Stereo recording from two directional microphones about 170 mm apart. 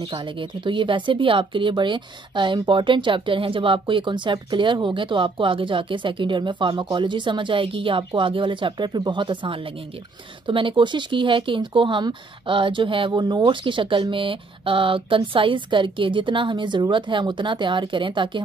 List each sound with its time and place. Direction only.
0.1 s speech: 30° right (ahead or behind)